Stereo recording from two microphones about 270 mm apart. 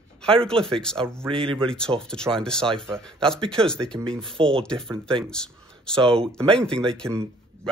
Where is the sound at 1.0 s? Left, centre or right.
Centre.